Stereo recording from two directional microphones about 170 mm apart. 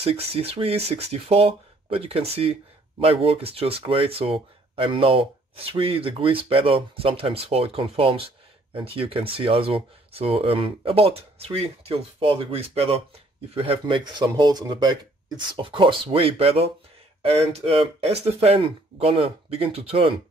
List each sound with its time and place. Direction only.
0.0 s speech: 35° right (ahead or behind)